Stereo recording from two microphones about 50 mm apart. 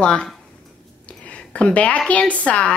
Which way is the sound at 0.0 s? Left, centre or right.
Centre.